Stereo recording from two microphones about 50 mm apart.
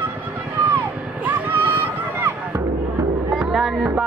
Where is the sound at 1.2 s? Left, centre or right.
Right.